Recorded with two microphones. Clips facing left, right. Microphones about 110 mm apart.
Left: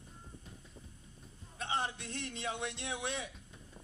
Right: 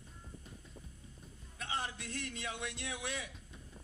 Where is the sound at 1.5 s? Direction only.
25° left (ahead or behind).